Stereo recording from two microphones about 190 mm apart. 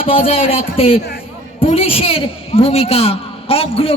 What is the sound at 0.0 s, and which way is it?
Speech, 30° left (ahead or behind).